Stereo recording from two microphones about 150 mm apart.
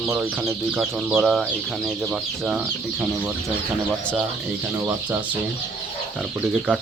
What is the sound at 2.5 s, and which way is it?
Speech, 5° right (ahead or behind).